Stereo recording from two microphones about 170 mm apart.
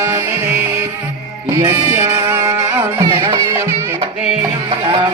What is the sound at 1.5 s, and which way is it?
Music, 15° right (ahead or behind).